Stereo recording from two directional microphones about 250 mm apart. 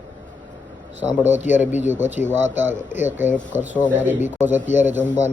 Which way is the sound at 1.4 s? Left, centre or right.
Left.